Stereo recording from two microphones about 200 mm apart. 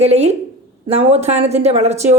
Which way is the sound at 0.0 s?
30° right (ahead or behind).